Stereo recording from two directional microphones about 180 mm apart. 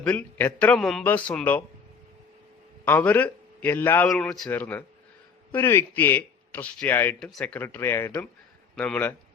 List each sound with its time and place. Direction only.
0.0 s a man's voice: 5° left (ahead or behind)
2.8 s a man's voice: 10° left (ahead or behind)